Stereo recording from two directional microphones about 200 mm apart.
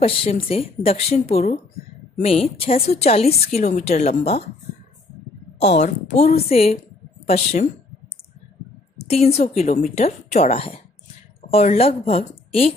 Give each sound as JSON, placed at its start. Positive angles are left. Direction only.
{"t": 0.0, "sound": "a woman's voice", "side_deg": 30}
{"t": 5.7, "sound": "a woman's voice", "side_deg": 35}
{"t": 8.9, "sound": "a woman's voice", "side_deg": 30}